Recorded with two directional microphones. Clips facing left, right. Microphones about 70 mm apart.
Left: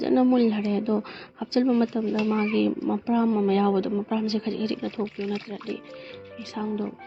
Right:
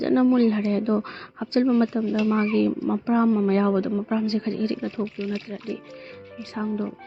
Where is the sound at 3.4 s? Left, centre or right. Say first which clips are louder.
Right 1 dB; right.